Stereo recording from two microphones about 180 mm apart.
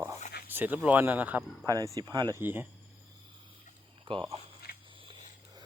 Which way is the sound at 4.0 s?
30° right (ahead or behind).